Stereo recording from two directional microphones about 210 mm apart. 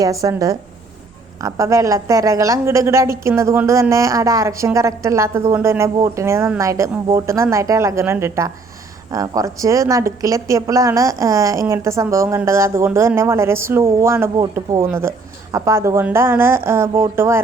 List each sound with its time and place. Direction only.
0.0 s speech: 15° right (ahead or behind)